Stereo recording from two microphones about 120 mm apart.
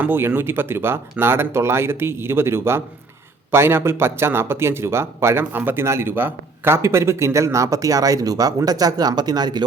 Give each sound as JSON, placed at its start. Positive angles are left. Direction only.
{"t": 0.0, "sound": "speech", "side_deg": -15}